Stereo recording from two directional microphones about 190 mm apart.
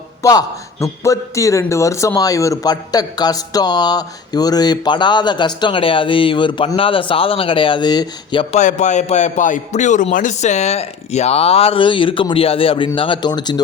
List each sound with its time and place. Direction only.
0.2 s a man's voice: 20° left (ahead or behind)
8.5 s a man's voice: 40° left (ahead or behind); by 13.6 s 20° left (ahead or behind)